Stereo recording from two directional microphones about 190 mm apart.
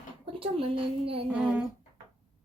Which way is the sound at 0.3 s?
30° right (ahead or behind).